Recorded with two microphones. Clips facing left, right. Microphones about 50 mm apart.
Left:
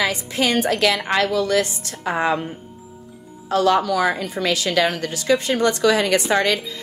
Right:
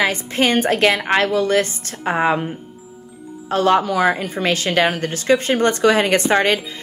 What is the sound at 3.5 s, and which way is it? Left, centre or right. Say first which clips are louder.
Speech: right 1 dB; right.